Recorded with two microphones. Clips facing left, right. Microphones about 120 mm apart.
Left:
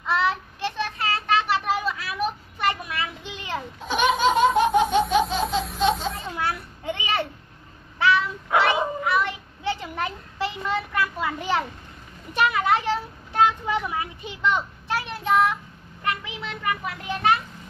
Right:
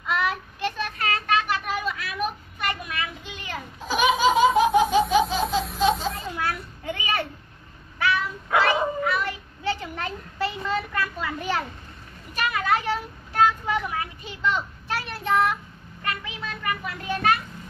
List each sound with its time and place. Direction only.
0.1 s child singing: 25° left (ahead or behind)
3.8 s laughter: centre (ahead or behind)
6.2 s a sound: 25° left (ahead or behind)
8.0 s dog: 25° left (ahead or behind)
8.6 s child singing: 20° left (ahead or behind)
12.4 s a sound: 20° left (ahead or behind)